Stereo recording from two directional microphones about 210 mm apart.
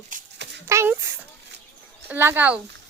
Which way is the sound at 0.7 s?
15° right (ahead or behind).